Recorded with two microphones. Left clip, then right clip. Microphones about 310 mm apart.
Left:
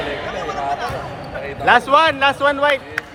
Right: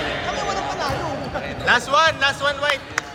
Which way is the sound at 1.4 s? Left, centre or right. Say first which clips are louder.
Left 5 dB; left.